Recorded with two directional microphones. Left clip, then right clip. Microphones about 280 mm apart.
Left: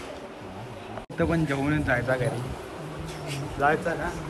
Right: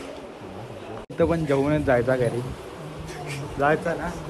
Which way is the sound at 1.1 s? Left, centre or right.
Centre.